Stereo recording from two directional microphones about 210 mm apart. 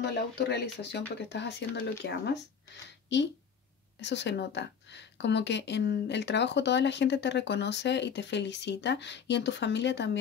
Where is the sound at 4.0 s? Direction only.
55° left (ahead or behind).